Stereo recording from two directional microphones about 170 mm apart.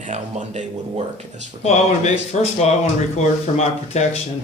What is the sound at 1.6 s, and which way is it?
Speech, 40° left (ahead or behind).